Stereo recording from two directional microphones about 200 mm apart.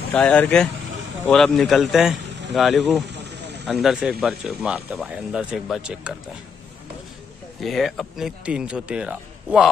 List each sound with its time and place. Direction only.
0.1 s speech: 5° left (ahead or behind)
3.1 s vehicle: 55° right (ahead or behind)
3.6 s speech: centre (ahead or behind)
7.6 s speech: centre (ahead or behind)